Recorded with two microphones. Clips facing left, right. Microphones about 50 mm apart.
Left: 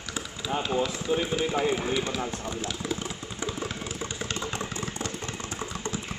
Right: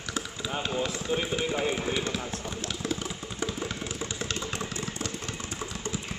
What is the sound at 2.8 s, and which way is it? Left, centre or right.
Vehicle, centre.